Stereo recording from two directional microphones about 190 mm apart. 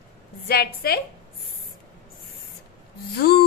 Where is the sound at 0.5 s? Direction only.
55° left (ahead or behind).